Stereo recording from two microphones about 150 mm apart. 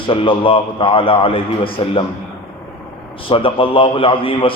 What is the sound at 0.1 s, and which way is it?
A man's voice, 35° left (ahead or behind).